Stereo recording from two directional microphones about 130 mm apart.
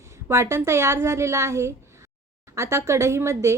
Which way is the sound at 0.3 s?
20° right (ahead or behind).